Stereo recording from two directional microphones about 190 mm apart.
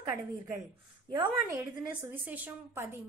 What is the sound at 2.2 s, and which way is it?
Speech, 10° right (ahead or behind).